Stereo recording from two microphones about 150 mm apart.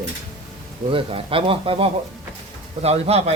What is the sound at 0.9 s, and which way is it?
A man's voice, 40° right (ahead or behind).